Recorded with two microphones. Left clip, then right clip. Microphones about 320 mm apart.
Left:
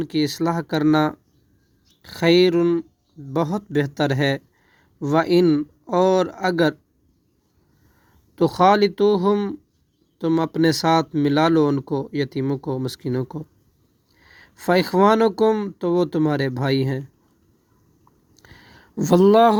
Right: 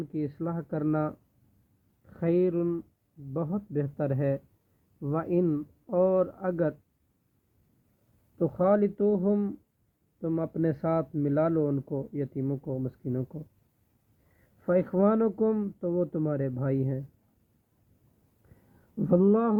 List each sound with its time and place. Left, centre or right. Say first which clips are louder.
0.0 s speech: left 11 dB; left
8.4 s speech: left 9 dB; left
14.6 s speech: left 8 dB; left
18.9 s speech: left 10 dB; left